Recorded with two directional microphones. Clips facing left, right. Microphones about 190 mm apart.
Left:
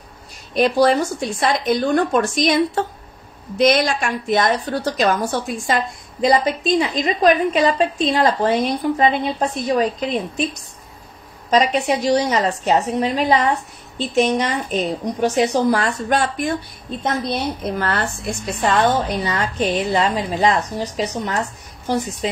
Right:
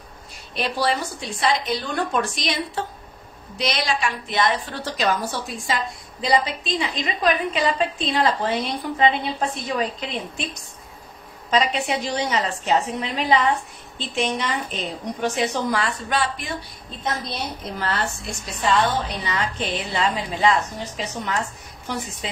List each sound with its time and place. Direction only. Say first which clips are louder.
0.6 s a woman's voice: left 9 dB; 45° left (ahead or behind)
11.5 s a woman's voice: left 5 dB; 40° left (ahead or behind)